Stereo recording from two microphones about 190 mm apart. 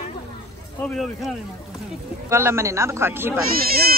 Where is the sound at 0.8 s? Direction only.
Centre (ahead or behind).